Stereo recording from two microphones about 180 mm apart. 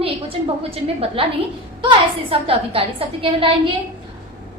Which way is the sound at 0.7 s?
30° right (ahead or behind).